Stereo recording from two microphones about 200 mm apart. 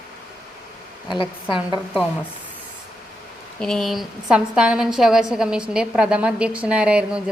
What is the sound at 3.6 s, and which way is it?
A woman's voice, centre (ahead or behind).